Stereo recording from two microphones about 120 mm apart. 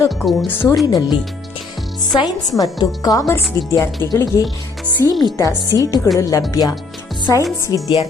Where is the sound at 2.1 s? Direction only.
35° left (ahead or behind).